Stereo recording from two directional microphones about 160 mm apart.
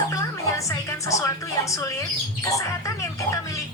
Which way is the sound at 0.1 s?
20° left (ahead or behind).